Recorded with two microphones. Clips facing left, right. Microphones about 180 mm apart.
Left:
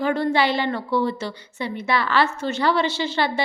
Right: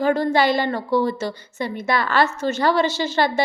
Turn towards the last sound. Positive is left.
turn(degrees=-45)  # may be behind; listen again after turning